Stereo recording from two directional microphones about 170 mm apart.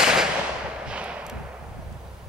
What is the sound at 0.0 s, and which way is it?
Fireworks, 5° right (ahead or behind).